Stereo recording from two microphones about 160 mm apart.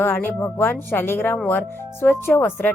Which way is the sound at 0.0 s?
15° left (ahead or behind).